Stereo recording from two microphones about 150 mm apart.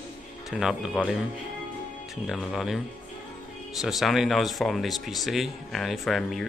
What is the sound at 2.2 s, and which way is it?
Speech, centre (ahead or behind).